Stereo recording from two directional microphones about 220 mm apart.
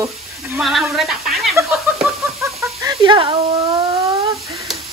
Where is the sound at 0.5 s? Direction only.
Centre (ahead or behind).